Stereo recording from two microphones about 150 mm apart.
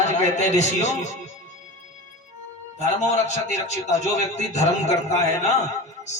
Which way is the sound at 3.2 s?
50° left (ahead or behind).